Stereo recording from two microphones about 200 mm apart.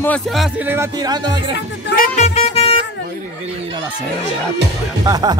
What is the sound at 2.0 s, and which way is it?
Music, 35° left (ahead or behind).